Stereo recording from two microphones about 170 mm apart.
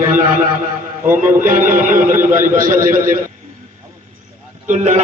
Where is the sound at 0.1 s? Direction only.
50° right (ahead or behind).